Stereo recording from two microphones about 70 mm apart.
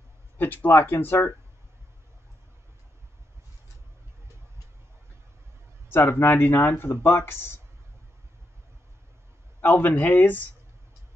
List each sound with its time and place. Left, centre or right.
0.4 s speech: left
5.9 s speech: left
9.6 s speech: left